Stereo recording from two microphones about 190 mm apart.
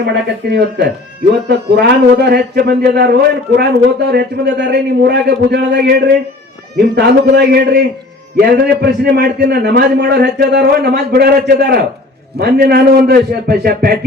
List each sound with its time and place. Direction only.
0.0 s a man's voice: 60° right (ahead or behind)